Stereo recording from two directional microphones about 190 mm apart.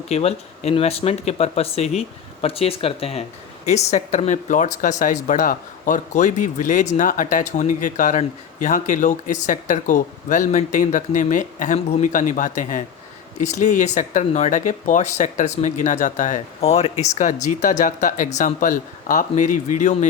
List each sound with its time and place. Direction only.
0.1 s speech: 35° left (ahead or behind)